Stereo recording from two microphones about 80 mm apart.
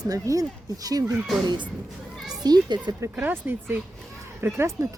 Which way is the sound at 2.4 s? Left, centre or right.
Right.